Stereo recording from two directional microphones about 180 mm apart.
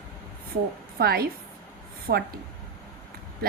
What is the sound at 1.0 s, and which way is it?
A woman's voice, 60° right (ahead or behind).